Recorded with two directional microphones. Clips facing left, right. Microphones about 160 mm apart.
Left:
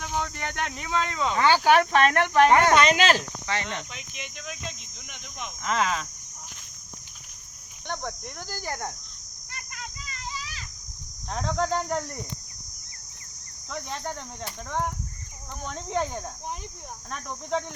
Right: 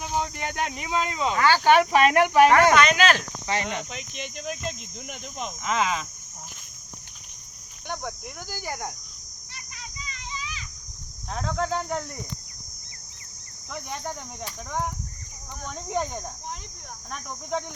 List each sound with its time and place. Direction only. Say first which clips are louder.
0.0 s speech: right 2 dB; 15° right (ahead or behind)
1.4 s speech: even; 20° left (ahead or behind)
1.6 s speech: right 4 dB; 5° right (ahead or behind)
2.7 s speech: even; 30° left (ahead or behind)
3.4 s cricket: right 3 dB; 15° right (ahead or behind)
4.2 s speech: right 6 dB; 35° right (ahead or behind)
5.6 s cricket: even; 5° right (ahead or behind)
7.9 s cricket: even; 5° right (ahead or behind)
9.5 s children playing: left 3 dB; 45° left (ahead or behind)
11.3 s cricket: left 1 dB; centre (ahead or behind)
13.9 s speech: right 1 dB; 10° right (ahead or behind)
15.6 s cricket: even; 5° right (ahead or behind)